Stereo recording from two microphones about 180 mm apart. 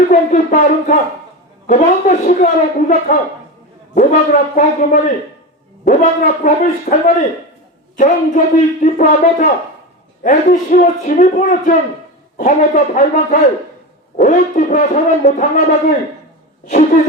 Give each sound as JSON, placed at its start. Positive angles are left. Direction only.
{"t": 0.1, "sound": "speech", "side_deg": 45}